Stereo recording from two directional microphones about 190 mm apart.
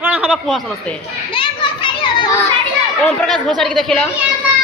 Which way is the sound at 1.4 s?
25° left (ahead or behind).